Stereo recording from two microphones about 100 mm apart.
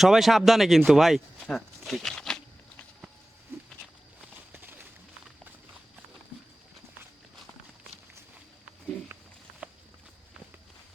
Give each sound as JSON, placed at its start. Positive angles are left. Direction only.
{"t": 0.0, "sound": "speech", "side_deg": 0}
{"t": 1.5, "sound": "a sound", "side_deg": 0}
{"t": 4.5, "sound": "horse", "side_deg": -20}
{"t": 9.6, "sound": "walk", "side_deg": -15}